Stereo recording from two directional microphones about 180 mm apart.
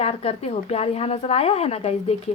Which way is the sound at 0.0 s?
35° left (ahead or behind).